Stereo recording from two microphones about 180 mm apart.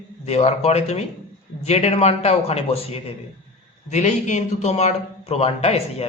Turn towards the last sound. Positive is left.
turn(degrees=35)  # may be behind; listen again after turning